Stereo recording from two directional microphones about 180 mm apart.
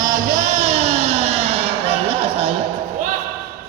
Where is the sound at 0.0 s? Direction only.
40° right (ahead or behind).